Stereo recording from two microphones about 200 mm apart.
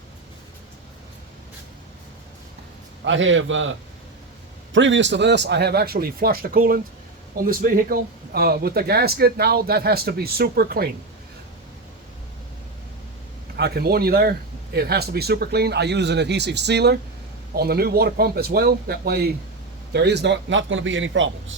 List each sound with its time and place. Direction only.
3.0 s a man's voice: 70° right (ahead or behind); by 10.9 s 50° right (ahead or behind)
13.6 s a man's voice: 50° right (ahead or behind); by 21.2 s 70° right (ahead or behind)